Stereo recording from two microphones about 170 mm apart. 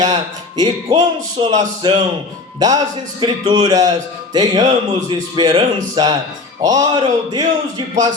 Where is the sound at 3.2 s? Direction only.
25° right (ahead or behind).